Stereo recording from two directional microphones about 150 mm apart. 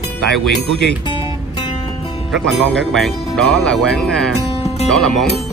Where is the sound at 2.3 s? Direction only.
5° left (ahead or behind).